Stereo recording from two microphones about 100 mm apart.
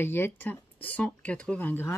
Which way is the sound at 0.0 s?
20° left (ahead or behind).